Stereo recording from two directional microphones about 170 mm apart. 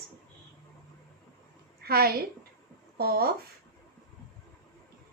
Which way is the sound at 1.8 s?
65° right (ahead or behind).